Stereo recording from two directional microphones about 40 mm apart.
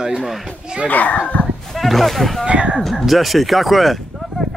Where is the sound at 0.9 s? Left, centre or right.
Left.